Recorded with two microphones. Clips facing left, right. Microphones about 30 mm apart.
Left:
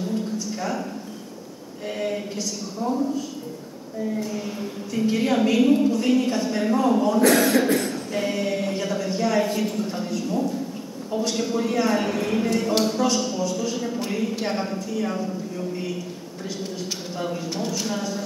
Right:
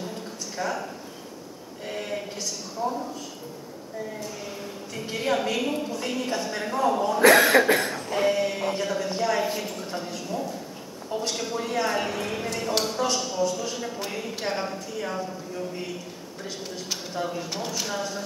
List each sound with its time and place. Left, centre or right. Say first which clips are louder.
0.6 s a sound: right 2 dB; centre
1.9 s a woman's voice: left 5 dB; centre
2.8 s speech: left 2 dB; centre
4.2 s a woman's voice: left 6 dB; centre
7.2 s cough: right 5 dB; right
8.3 s a sound: even; centre
8.7 s a woman's voice: left 2 dB; centre
17.1 s a woman's voice: left 1 dB; centre